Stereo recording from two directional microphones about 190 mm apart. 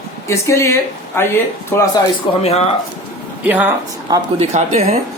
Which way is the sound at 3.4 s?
10° right (ahead or behind).